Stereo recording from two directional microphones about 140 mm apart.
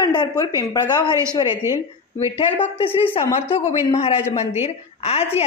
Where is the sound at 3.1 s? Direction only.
45° left (ahead or behind).